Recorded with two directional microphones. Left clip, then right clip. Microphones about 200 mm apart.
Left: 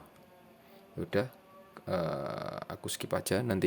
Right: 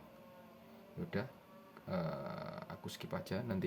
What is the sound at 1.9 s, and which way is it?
Speech, 60° left (ahead or behind).